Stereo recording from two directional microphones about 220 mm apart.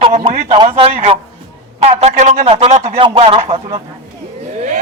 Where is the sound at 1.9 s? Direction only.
30° right (ahead or behind).